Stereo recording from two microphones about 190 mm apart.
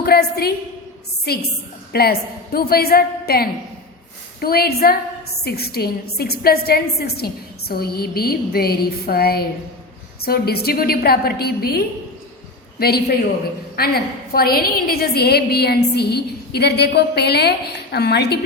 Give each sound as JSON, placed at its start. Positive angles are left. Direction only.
{"t": 0.0, "sound": "a woman's voice", "side_deg": 55}